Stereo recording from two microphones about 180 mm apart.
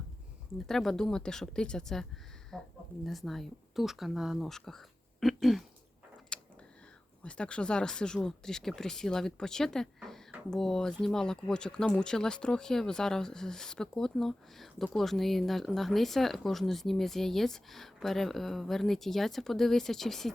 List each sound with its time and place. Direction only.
0.7 s speech: centre (ahead or behind)
6.3 s a sound: 5° left (ahead or behind)
7.3 s speech: 5° left (ahead or behind)